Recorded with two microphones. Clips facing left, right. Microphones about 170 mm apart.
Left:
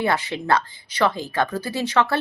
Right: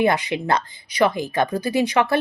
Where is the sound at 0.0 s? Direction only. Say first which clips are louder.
Right 4 dB; 15° right (ahead or behind).